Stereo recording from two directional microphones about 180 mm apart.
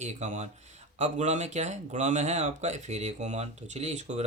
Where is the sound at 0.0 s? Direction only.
40° right (ahead or behind).